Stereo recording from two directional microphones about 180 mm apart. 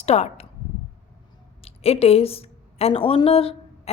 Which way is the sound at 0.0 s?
35° left (ahead or behind).